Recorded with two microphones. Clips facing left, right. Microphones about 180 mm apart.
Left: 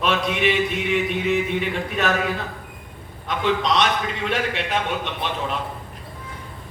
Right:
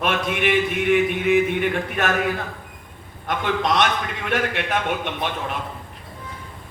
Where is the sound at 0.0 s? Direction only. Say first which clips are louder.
Left 1 dB; 55° right (ahead or behind).